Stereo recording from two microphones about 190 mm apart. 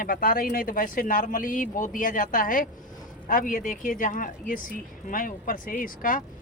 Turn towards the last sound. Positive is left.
turn(degrees=45)  # may be behind; listen again after turning